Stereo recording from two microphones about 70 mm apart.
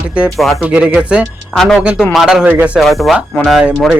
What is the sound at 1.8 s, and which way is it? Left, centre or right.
Speech, centre.